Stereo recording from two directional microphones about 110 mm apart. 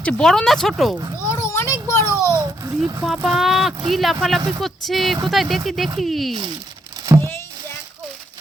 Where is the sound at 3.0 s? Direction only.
Centre (ahead or behind).